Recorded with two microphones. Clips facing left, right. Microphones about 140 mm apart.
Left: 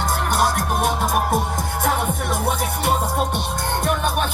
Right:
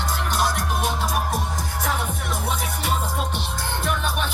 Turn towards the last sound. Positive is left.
turn(degrees=50)  # may be behind; listen again after turning